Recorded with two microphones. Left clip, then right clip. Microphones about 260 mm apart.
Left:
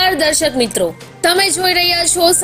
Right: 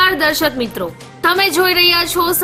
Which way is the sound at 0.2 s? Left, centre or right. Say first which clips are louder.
Left 1 dB; centre.